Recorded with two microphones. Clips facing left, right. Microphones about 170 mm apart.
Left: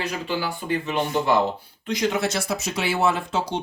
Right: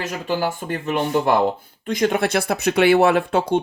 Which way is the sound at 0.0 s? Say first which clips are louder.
Right 4 dB; 45° right (ahead or behind).